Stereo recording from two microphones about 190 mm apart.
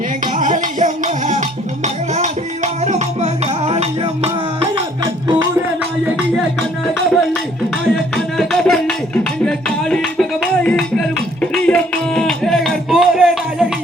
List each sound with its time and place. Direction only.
0.3 s music: 45° right (ahead or behind)
5.3 s music: 20° right (ahead or behind)
6.3 s music: centre (ahead or behind)